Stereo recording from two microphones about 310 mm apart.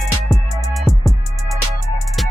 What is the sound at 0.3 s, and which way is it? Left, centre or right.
Music, centre.